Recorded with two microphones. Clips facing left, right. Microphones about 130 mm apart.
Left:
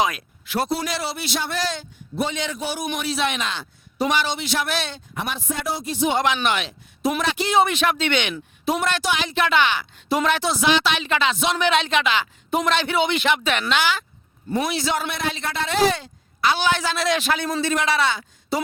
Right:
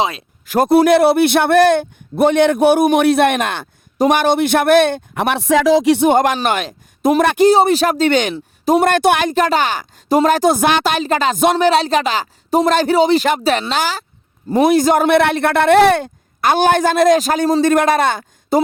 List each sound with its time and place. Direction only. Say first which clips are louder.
0.4 s a man's voice: right 13 dB; 45° right (ahead or behind); by 6.1 s 80° right
6.1 s a man's voice: right 7 dB; 50° right (ahead or behind)
9.3 s a man's voice: right 5 dB; 40° right (ahead or behind)